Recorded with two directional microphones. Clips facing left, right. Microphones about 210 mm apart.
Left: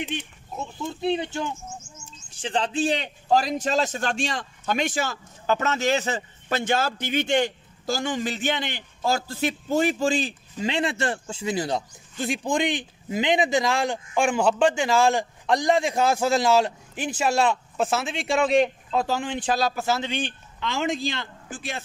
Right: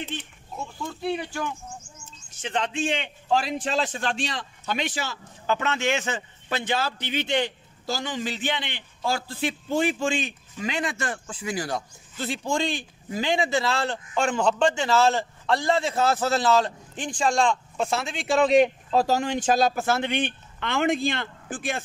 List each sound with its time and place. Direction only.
0.0 s a man's voice: 15° left (ahead or behind)
18.9 s speech: 40° right (ahead or behind)